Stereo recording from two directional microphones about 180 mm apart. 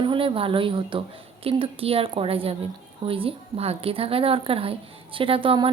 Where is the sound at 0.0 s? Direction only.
30° right (ahead or behind).